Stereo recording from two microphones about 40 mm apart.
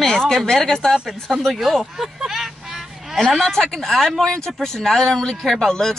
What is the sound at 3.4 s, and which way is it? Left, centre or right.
Speech, centre.